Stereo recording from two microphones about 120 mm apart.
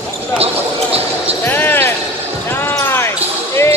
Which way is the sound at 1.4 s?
15° left (ahead or behind).